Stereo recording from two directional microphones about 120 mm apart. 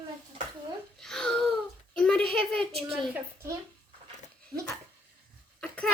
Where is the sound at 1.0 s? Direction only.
5° left (ahead or behind).